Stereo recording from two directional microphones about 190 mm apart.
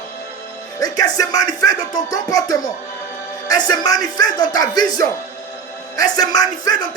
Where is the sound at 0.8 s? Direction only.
20° left (ahead or behind).